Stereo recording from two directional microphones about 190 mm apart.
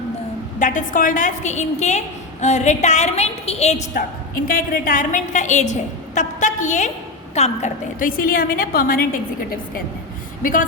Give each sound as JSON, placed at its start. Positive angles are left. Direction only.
{"t": 0.6, "sound": "a woman's voice", "side_deg": 45}
{"t": 4.4, "sound": "a woman's voice", "side_deg": 50}
{"t": 10.4, "sound": "a woman's voice", "side_deg": 45}